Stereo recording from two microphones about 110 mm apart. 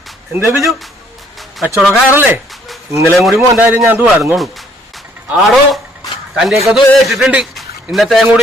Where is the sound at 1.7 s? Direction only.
Centre (ahead or behind).